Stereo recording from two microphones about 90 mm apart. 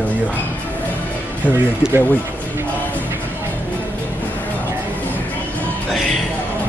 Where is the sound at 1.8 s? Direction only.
10° right (ahead or behind).